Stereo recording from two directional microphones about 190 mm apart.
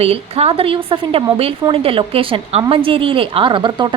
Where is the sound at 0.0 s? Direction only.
30° right (ahead or behind).